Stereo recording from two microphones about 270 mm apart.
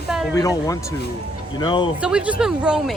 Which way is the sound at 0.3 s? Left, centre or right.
Centre.